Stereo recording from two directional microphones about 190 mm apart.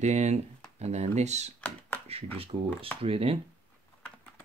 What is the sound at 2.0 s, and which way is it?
Speech, 30° right (ahead or behind).